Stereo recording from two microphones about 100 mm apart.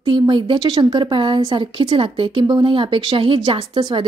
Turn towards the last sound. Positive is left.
turn(degrees=-55)  # may be behind; listen again after turning